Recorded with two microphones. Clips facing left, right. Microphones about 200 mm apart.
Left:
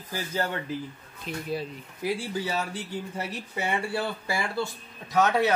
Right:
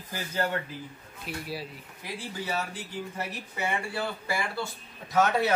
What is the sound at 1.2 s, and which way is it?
Speech, 5° right (ahead or behind).